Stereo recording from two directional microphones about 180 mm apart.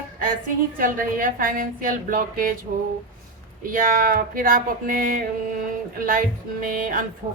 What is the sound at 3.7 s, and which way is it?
A woman's voice, 50° right (ahead or behind).